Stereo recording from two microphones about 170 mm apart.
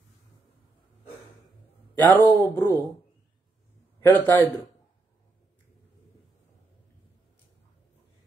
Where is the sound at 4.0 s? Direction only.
10° left (ahead or behind).